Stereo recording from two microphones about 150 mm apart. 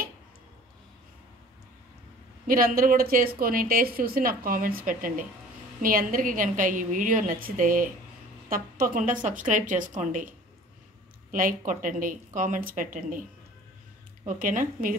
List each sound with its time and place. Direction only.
2.4 s a woman's voice: 70° right (ahead or behind)
11.3 s a woman's voice: 60° right (ahead or behind)
14.2 s a woman's voice: 60° right (ahead or behind)